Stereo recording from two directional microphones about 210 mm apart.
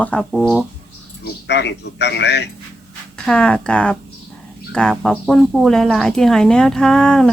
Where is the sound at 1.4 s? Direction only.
55° left (ahead or behind).